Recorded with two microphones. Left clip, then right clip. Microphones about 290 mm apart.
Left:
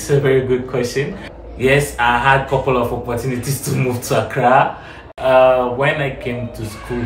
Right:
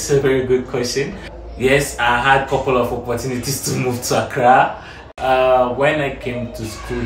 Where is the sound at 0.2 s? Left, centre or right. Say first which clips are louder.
Left 1 dB; centre.